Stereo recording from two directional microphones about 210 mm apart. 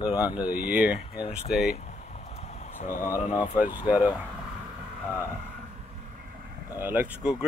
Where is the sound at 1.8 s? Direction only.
30° left (ahead or behind).